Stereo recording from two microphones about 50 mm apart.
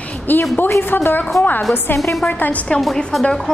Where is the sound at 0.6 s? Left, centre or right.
Left.